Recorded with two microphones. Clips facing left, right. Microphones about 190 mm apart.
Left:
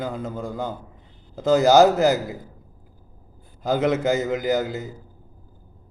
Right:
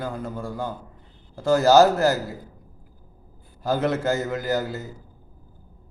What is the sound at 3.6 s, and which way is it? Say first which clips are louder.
A man's voice: left 2 dB; 15° left (ahead or behind).